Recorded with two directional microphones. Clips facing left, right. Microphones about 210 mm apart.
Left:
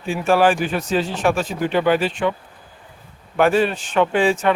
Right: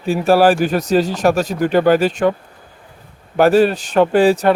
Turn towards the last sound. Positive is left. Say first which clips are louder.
# right 5 dB
turn(degrees=-40)  # may be behind; listen again after turning